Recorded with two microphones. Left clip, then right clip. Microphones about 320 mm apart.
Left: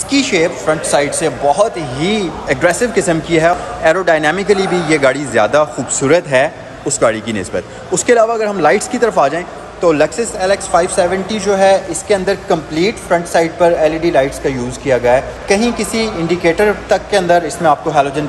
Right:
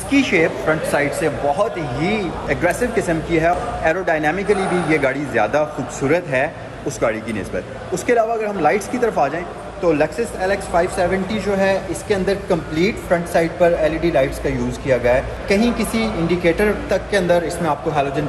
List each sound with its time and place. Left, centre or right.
0.3 s speech: centre